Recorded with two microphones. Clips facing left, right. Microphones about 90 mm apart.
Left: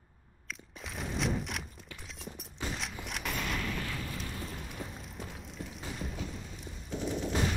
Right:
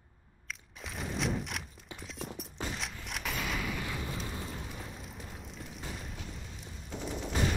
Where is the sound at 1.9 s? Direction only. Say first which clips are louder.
Right 5 dB; centre (ahead or behind).